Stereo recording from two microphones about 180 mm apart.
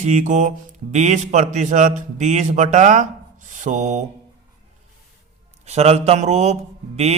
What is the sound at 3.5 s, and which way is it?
Mantra, 45° right (ahead or behind).